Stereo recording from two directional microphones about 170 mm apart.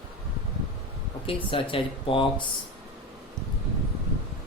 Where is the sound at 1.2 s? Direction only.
30° left (ahead or behind).